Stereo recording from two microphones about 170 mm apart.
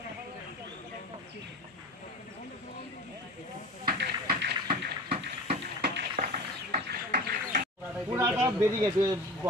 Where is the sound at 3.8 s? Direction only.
60° right (ahead or behind).